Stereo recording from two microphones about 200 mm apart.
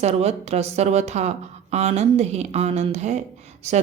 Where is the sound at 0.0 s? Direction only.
30° right (ahead or behind).